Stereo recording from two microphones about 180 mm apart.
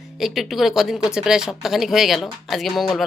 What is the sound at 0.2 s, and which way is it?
Speech, centre (ahead or behind).